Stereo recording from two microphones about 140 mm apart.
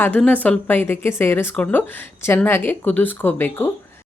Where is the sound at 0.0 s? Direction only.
10° left (ahead or behind).